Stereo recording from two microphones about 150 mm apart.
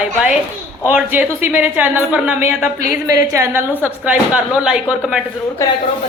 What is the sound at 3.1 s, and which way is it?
A woman's voice, 20° right (ahead or behind).